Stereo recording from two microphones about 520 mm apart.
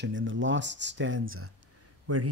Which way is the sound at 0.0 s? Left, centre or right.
Right.